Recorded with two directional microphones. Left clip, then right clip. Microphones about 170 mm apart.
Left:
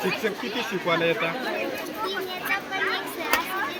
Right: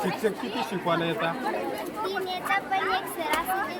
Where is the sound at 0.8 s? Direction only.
55° right (ahead or behind).